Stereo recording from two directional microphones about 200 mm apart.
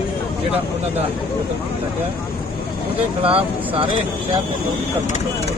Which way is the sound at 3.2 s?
25° right (ahead or behind).